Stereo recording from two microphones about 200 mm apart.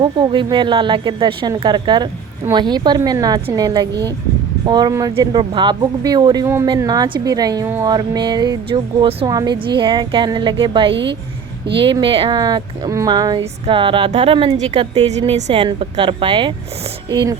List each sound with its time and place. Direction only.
0.0 s speech: 25° right (ahead or behind)